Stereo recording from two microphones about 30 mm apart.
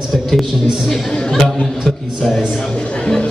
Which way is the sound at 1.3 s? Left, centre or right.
Centre.